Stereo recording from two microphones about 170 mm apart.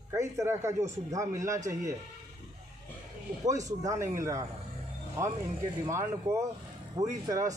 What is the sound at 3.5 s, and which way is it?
Speech, 20° right (ahead or behind).